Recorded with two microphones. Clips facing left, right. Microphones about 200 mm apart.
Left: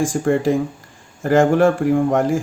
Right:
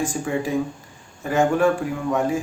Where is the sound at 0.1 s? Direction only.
65° left (ahead or behind).